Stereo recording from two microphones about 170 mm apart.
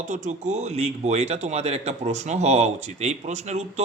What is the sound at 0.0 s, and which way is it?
A man's voice, 45° right (ahead or behind).